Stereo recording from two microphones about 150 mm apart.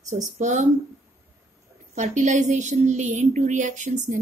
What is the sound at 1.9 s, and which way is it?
A woman's voice, 55° right (ahead or behind).